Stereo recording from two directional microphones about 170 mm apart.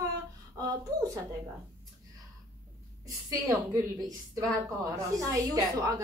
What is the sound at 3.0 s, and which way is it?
A woman's voice, 20° right (ahead or behind).